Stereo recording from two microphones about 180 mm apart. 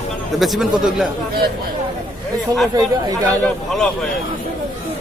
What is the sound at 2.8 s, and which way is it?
Speech, 20° right (ahead or behind).